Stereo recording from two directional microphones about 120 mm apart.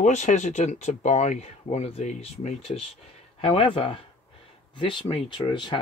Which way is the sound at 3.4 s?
45° left (ahead or behind).